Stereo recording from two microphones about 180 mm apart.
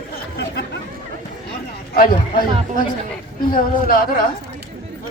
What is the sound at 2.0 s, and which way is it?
Speech, 55° left (ahead or behind).